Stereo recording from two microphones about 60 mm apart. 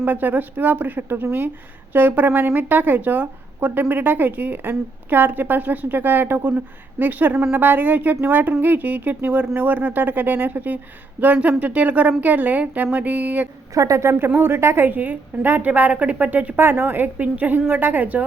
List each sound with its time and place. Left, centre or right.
0.0 s a woman's voice: right
13.7 s a woman's voice: right
14.3 s speech: right
14.8 s a woman's voice: right
16.6 s a woman's voice: right